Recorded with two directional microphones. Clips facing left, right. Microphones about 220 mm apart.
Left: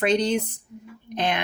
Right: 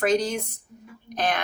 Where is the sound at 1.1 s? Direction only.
25° left (ahead or behind).